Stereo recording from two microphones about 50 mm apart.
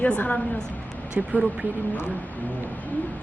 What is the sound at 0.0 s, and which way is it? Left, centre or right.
Speech, left.